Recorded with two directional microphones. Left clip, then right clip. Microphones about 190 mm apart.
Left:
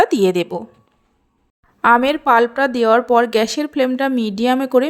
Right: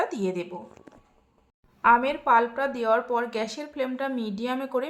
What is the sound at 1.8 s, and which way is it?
Speech, 40° left (ahead or behind).